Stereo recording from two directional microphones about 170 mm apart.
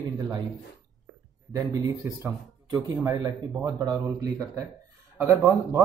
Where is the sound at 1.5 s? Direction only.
20° right (ahead or behind).